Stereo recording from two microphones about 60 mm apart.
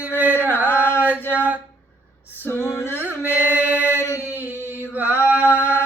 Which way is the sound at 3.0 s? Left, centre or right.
Right.